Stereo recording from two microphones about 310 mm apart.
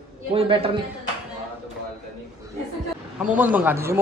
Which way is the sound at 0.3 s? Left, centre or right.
Centre.